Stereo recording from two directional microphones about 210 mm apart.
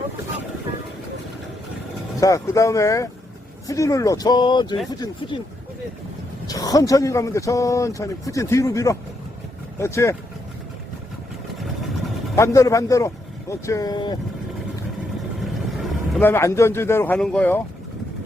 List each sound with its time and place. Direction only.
2.2 s speech: 15° left (ahead or behind)
6.5 s speech: 15° left (ahead or behind)
11.5 s vehicle: centre (ahead or behind)
12.4 s speech: 15° left (ahead or behind)
15.4 s vehicle: centre (ahead or behind)
16.3 s speech: 15° left (ahead or behind)